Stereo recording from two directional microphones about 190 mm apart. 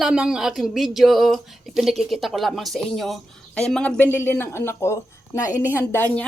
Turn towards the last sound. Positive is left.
turn(degrees=10)  # may be behind; listen again after turning